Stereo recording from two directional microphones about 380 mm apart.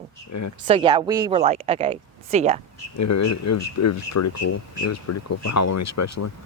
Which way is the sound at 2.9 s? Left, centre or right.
Left.